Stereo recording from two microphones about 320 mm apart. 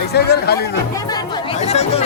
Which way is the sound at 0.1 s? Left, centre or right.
Left.